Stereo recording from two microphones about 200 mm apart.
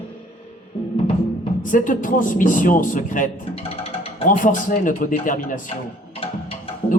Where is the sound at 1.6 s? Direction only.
40° left (ahead or behind).